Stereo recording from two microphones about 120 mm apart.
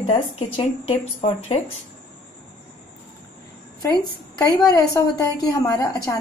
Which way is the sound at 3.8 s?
35° left (ahead or behind).